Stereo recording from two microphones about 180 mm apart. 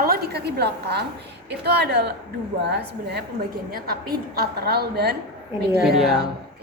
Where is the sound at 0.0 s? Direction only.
60° right (ahead or behind).